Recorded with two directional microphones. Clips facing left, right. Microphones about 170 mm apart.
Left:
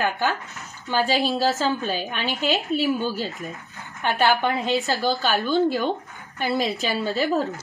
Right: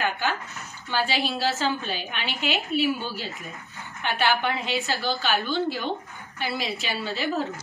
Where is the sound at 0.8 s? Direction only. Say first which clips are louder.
Left 5 dB; 45° left (ahead or behind).